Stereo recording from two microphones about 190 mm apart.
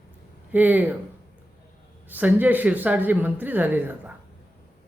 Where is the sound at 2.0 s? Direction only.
10° right (ahead or behind).